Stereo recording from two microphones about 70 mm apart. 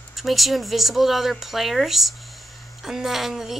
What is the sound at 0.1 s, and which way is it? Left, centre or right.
Speech, centre.